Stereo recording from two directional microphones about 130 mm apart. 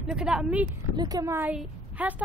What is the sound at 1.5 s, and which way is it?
Speech, 10° right (ahead or behind).